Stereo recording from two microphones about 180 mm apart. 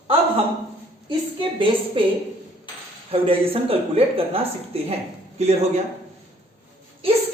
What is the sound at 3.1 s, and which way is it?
Speech, 30° right (ahead or behind).